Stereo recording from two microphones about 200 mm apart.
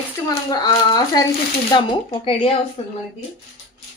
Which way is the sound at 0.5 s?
20° left (ahead or behind).